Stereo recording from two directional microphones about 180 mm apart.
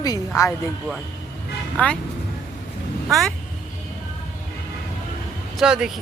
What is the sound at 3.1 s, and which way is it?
Speech, centre (ahead or behind).